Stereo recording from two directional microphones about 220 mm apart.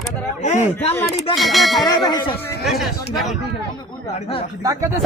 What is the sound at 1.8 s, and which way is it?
Speech, 15° left (ahead or behind).